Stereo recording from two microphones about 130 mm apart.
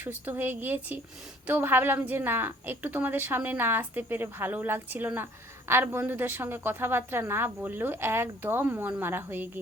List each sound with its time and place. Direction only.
0.0 s a woman's voice: 15° right (ahead or behind)